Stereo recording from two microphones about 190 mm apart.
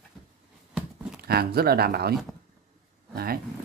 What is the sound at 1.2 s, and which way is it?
Speech, 55° right (ahead or behind).